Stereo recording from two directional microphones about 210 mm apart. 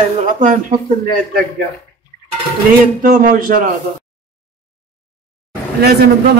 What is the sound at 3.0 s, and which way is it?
Speech, 40° right (ahead or behind).